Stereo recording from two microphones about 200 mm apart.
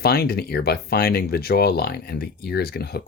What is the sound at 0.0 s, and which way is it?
Speech, 50° left (ahead or behind).